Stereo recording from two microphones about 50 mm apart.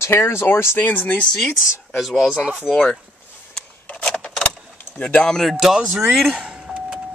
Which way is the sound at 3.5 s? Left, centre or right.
Left.